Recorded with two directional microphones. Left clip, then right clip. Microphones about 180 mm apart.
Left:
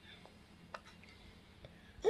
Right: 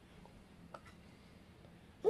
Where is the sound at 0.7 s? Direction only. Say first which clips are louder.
Left 4 dB; 20° right (ahead or behind).